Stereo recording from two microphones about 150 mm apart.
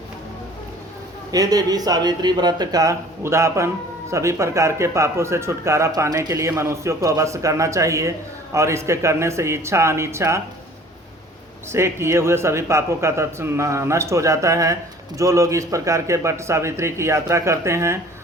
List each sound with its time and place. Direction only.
1.3 s speech: 25° right (ahead or behind)
11.7 s speech: 15° right (ahead or behind)